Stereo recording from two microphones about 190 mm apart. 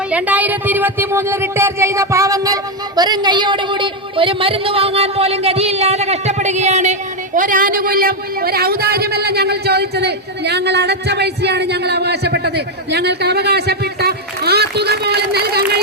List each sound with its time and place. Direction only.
0.1 s speech: 5° right (ahead or behind); by 15.8 s 55° right (ahead or behind)